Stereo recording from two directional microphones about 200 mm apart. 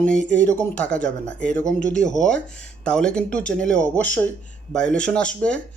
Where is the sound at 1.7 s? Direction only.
40° left (ahead or behind).